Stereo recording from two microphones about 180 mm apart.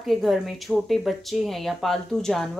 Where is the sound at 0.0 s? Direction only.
Centre (ahead or behind).